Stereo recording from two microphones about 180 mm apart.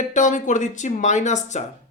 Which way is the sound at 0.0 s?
45° left (ahead or behind).